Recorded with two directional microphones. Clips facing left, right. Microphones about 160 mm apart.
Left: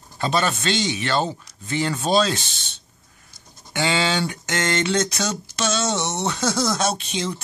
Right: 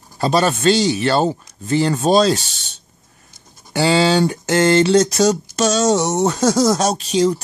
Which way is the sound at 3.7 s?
35° right (ahead or behind).